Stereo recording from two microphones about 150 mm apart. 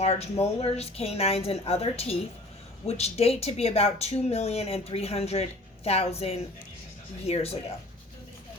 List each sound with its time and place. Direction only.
0.0 s speech: 45° left (ahead or behind)